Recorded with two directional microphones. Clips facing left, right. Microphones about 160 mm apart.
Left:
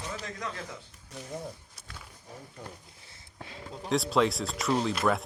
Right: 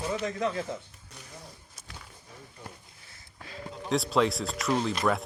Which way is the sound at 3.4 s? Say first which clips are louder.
Right 1 dB; 25° left (ahead or behind).